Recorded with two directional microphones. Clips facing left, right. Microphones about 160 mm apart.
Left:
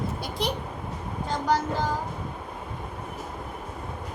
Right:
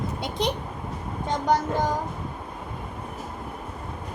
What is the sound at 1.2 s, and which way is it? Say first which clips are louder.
Speech: right 2 dB; 20° right (ahead or behind).